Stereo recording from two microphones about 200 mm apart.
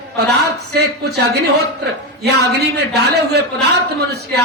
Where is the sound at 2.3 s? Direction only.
55° right (ahead or behind).